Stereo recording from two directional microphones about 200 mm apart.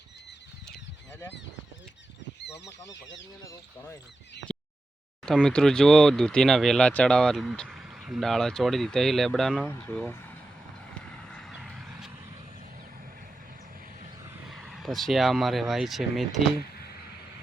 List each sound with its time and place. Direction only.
2.9 s speech: 65° left (ahead or behind)
4.5 s a sound: 5° left (ahead or behind)
5.2 s speech: 5° left (ahead or behind)
11.3 s vehicle: 5° left (ahead or behind)
14.4 s speech: centre (ahead or behind)